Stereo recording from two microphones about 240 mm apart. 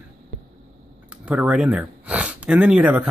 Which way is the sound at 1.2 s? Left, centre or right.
Centre.